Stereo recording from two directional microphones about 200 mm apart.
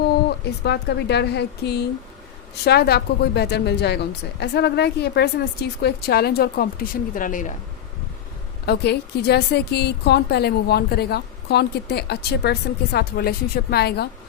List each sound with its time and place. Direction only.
0.1 s a woman's voice: 55° left (ahead or behind)
8.6 s a woman's voice: 55° left (ahead or behind)